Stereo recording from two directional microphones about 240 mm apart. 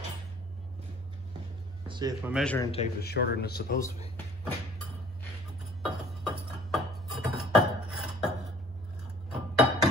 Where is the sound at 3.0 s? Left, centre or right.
Left.